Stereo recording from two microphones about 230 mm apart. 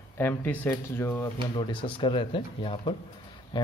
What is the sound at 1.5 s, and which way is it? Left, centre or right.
Speech, left.